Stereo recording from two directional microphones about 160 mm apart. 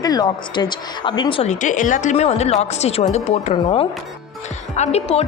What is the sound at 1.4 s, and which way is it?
Speech, 55° left (ahead or behind).